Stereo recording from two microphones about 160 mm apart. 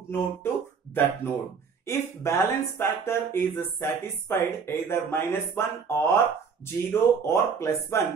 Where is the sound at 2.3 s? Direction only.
20° left (ahead or behind).